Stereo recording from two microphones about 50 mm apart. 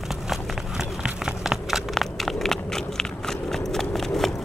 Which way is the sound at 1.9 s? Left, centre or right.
Centre.